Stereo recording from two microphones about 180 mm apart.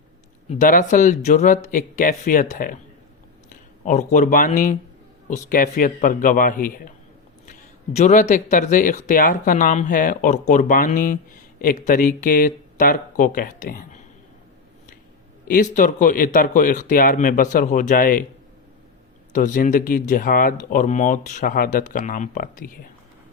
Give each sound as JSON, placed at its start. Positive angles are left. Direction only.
{"t": 0.4, "sound": "speech", "side_deg": 45}
{"t": 7.9, "sound": "speech", "side_deg": 45}
{"t": 15.4, "sound": "speech", "side_deg": 50}
{"t": 19.3, "sound": "speech", "side_deg": 45}